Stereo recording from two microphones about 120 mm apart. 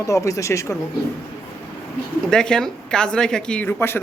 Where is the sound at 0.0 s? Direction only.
25° left (ahead or behind).